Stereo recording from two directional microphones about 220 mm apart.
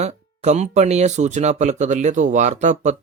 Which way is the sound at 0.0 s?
30° right (ahead or behind).